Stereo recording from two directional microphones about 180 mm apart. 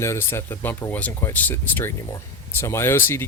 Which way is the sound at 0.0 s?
15° left (ahead or behind).